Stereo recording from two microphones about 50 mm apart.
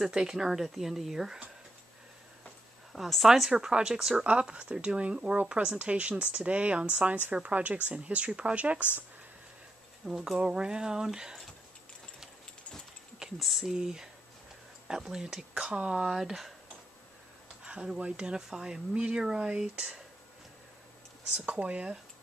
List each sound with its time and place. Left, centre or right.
0.0 s speech: centre
2.9 s speech: centre; by 8.8 s right
10.0 s speech: centre
13.2 s speech: centre
17.6 s speech: centre
21.5 s speech: right